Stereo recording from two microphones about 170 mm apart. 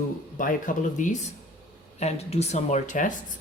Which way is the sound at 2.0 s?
40° left (ahead or behind).